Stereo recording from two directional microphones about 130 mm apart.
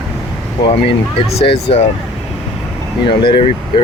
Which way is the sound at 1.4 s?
50° left (ahead or behind).